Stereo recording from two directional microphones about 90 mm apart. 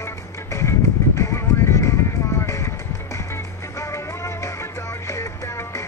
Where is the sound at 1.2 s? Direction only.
30° left (ahead or behind).